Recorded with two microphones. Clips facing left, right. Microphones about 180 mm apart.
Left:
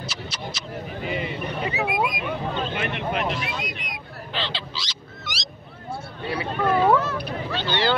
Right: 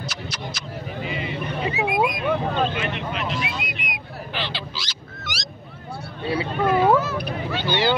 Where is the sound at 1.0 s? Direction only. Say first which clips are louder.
Left 2 dB; 50° left (ahead or behind).